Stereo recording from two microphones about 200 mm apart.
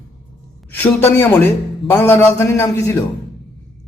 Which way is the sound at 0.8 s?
10° left (ahead or behind).